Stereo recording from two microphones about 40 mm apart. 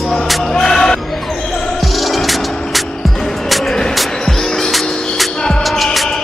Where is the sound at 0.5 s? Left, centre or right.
Centre.